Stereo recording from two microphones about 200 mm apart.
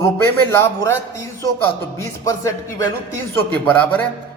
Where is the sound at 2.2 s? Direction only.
15° left (ahead or behind).